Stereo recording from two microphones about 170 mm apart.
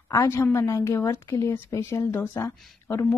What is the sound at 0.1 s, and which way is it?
A woman's voice, 15° left (ahead or behind).